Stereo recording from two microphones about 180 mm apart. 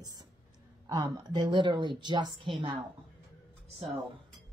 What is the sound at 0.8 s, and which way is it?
Speech, 20° right (ahead or behind).